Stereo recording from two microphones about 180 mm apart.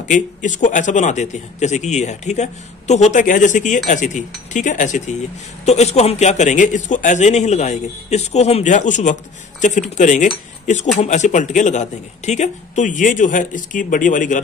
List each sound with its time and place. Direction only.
0.1 s a man's voice: 45° left (ahead or behind)